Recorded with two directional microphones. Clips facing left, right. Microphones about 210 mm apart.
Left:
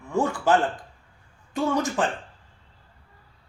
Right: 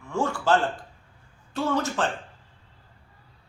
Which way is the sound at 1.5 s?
15° left (ahead or behind).